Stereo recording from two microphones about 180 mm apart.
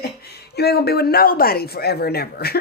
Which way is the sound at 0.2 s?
65° left (ahead or behind).